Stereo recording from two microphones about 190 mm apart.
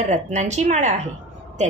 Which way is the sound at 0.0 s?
40° right (ahead or behind).